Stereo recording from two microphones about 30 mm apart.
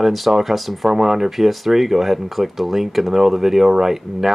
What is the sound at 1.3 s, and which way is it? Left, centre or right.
Speech, centre.